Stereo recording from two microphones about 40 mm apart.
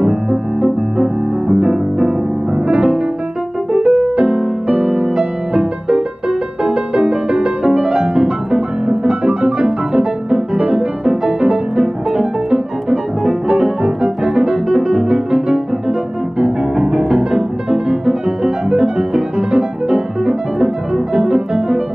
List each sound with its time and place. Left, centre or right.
0.0 s music: centre